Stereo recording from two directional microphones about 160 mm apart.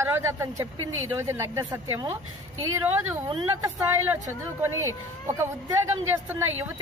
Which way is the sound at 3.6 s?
15° right (ahead or behind).